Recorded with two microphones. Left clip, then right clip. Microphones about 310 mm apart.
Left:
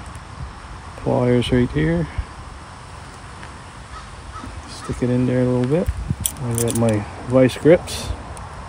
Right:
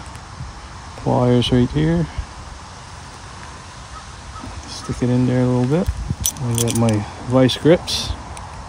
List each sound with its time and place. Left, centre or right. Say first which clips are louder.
1.0 s speech: right 1 dB; right
4.7 s speech: right 1 dB; right